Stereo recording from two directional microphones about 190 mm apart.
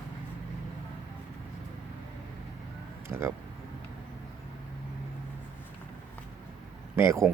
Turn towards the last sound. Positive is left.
turn(degrees=-15)  # may be behind; listen again after turning